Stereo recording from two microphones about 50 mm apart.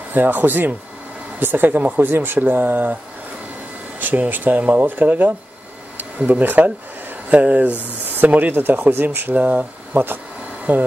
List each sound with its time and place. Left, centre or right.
0.1 s speech: right
2.0 s speech: right
4.0 s speech: right
9.3 s speech: right
9.9 s speech: right
10.7 s speech: right